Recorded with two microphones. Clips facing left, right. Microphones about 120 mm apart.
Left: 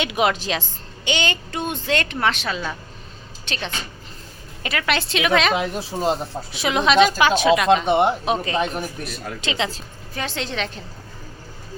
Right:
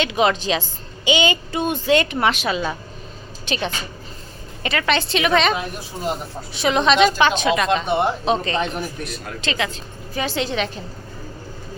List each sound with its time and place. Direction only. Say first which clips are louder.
0.0 s a woman's voice: right 2 dB; 10° left (ahead or behind); by 3.7 s 10° right (ahead or behind)
4.6 s speech: right 3 dB; 5° left (ahead or behind)
5.5 s speech: left 4 dB; 25° left (ahead or behind)
6.5 s a woman's voice: right 2 dB; 5° left (ahead or behind)
7.9 s speech: left 2 dB; 20° left (ahead or behind)
8.2 s speech: right 1 dB; 10° left (ahead or behind)
9.4 s a woman's voice: right 1 dB; 15° left (ahead or behind)
10.2 s speech: right 4 dB; 5° right (ahead or behind)